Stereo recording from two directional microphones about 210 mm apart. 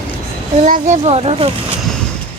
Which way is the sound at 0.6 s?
35° right (ahead or behind).